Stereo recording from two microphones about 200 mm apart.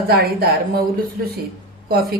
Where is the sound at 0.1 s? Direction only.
50° right (ahead or behind).